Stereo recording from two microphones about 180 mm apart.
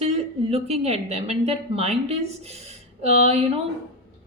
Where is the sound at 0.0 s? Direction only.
35° right (ahead or behind).